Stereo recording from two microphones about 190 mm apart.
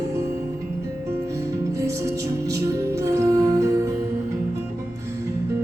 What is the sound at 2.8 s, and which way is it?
Music, 15° right (ahead or behind).